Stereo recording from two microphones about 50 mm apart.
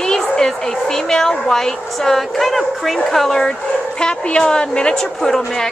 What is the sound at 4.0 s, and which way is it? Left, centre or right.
A woman's voice, centre.